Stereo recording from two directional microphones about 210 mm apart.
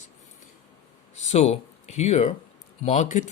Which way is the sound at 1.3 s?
30° left (ahead or behind).